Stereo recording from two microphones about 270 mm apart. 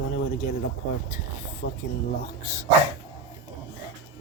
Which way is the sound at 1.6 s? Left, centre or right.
Left.